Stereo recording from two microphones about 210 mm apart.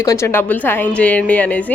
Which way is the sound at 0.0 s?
15° left (ahead or behind).